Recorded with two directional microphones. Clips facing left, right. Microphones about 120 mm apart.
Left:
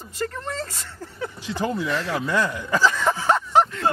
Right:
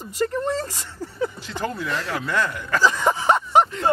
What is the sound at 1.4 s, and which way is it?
Speech, 15° left (ahead or behind).